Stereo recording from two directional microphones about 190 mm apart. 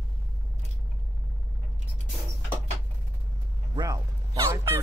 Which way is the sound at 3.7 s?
20° right (ahead or behind).